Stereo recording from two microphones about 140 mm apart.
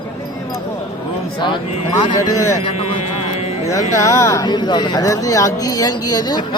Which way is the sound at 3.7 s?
20° left (ahead or behind).